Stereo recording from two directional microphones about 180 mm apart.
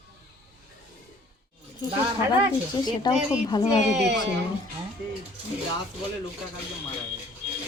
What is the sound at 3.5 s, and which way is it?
Speech, 20° left (ahead or behind).